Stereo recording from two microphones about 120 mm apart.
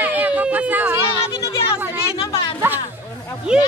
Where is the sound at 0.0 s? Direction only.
15° right (ahead or behind).